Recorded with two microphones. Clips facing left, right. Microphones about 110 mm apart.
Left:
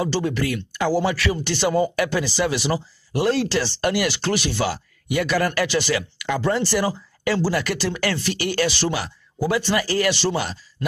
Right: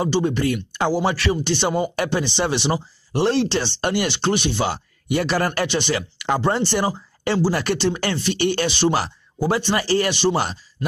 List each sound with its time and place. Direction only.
0.1 s speech: 25° right (ahead or behind)
8.9 s speech: 35° right (ahead or behind)